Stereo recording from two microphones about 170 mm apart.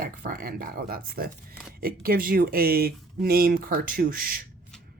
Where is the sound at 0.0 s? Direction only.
55° right (ahead or behind).